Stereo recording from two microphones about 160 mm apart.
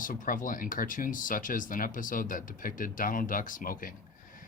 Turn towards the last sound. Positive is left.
turn(degrees=60)  # may be behind; listen again after turning